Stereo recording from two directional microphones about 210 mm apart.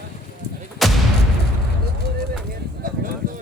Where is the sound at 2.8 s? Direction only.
40° right (ahead or behind).